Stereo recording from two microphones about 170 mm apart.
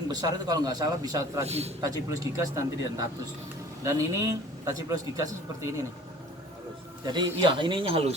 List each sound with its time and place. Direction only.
0.1 s a man's voice: 20° right (ahead or behind)
1.5 s a man's voice: 40° right (ahead or behind)
1.8 s a man's voice: 20° right (ahead or behind)
7.0 s a man's voice: 25° right (ahead or behind)